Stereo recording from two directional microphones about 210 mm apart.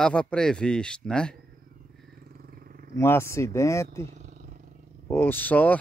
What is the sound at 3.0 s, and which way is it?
Speech, 10° left (ahead or behind).